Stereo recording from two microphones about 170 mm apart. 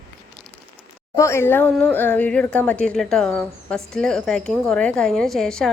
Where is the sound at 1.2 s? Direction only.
15° left (ahead or behind).